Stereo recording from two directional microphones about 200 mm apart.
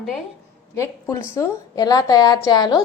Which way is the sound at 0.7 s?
15° left (ahead or behind).